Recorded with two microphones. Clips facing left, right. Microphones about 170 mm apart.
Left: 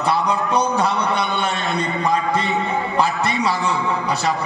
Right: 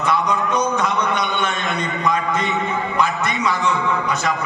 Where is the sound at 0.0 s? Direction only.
35° left (ahead or behind).